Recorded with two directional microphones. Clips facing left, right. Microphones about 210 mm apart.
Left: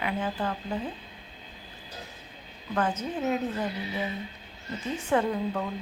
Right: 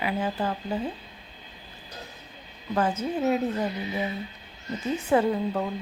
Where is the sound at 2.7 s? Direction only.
10° right (ahead or behind).